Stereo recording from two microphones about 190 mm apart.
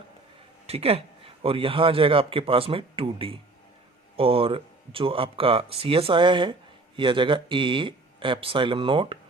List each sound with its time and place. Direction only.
0.7 s speech: 30° right (ahead or behind)